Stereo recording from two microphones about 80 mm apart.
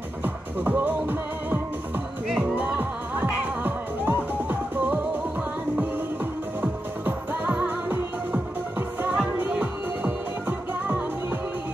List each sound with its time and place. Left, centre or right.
0.2 s music: right
6.6 s music: right